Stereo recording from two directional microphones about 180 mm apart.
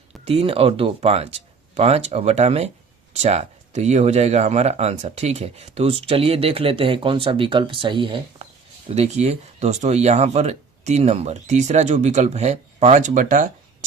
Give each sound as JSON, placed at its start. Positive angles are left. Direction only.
{"t": 0.3, "sound": "speech", "side_deg": -30}
{"t": 8.9, "sound": "speech", "side_deg": -40}